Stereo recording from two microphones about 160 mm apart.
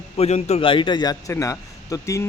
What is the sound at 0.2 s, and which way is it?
A man's voice, 45° left (ahead or behind).